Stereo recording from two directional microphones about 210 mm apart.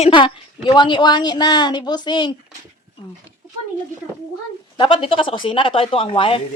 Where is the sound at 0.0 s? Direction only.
25° left (ahead or behind).